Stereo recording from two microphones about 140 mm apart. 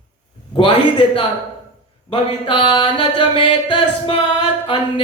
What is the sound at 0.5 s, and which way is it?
Speech, 35° left (ahead or behind).